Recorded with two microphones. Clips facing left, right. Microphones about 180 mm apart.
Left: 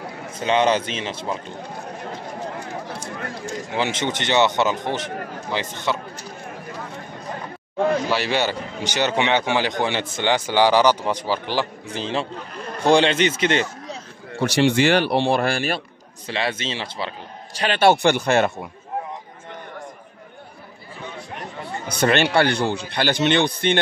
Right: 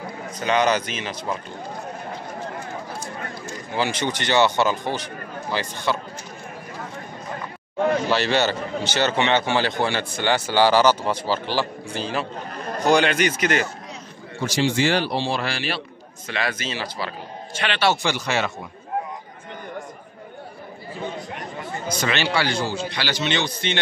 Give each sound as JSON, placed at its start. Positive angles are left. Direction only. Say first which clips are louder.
{"t": 0.4, "sound": "a man's voice", "louder": "left 2 dB", "side_deg": 25}
{"t": 3.7, "sound": "a man's voice", "louder": "even", "side_deg": 20}
{"t": 8.1, "sound": "a man's voice", "louder": "right 1 dB", "side_deg": 10}
{"t": 14.4, "sound": "a man's voice", "louder": "left 4 dB", "side_deg": 65}
{"t": 16.3, "sound": "a man's voice", "louder": "left 2 dB", "side_deg": 30}
{"t": 17.6, "sound": "speech", "louder": "left 5 dB", "side_deg": 45}
{"t": 21.8, "sound": "a man's voice", "louder": "left 6 dB", "side_deg": 60}